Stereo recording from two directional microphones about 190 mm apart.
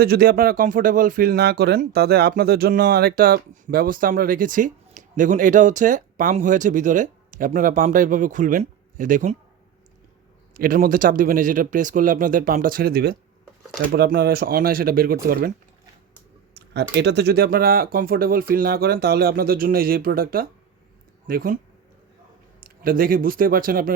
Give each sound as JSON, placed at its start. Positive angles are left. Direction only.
{"t": 0.0, "sound": "speech", "side_deg": -55}
{"t": 10.5, "sound": "speech", "side_deg": -50}
{"t": 16.6, "sound": "speech", "side_deg": -65}
{"t": 22.6, "sound": "speech", "side_deg": -50}